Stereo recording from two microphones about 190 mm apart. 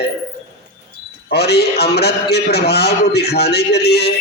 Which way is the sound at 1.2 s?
60° left (ahead or behind).